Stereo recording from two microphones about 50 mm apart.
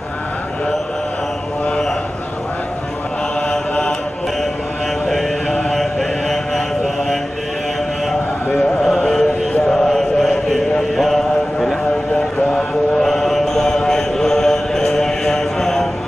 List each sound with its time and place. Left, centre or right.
3.4 s mantra: left
5.0 s mantra: centre
8.5 s chant: centre
12.4 s mantra: centre